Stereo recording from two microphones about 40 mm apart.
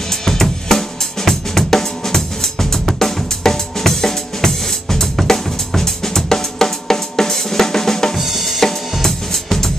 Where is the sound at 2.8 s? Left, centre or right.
Centre.